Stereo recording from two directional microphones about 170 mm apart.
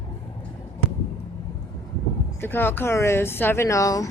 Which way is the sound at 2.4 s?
10° left (ahead or behind).